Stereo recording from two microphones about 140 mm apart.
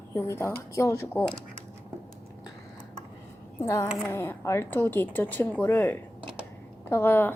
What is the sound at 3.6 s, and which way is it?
Speech, 20° left (ahead or behind).